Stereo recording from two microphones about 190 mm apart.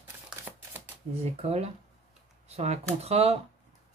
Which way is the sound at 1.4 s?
35° right (ahead or behind).